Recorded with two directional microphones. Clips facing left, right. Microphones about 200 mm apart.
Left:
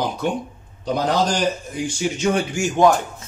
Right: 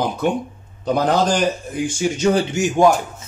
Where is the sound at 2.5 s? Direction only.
15° right (ahead or behind).